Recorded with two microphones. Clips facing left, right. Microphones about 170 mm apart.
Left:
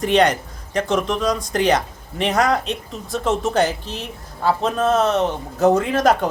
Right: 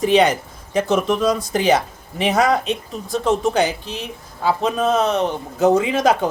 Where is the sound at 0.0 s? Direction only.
5° right (ahead or behind).